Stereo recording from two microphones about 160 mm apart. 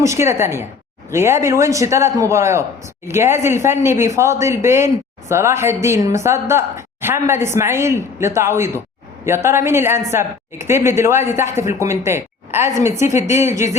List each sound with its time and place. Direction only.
0.0 s a woman's voice: 20° right (ahead or behind)